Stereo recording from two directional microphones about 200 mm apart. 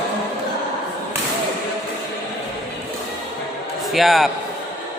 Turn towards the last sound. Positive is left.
turn(degrees=0)  # may be behind; listen again after turning